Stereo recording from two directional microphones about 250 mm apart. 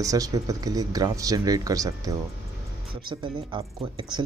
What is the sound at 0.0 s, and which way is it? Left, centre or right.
Speech, centre.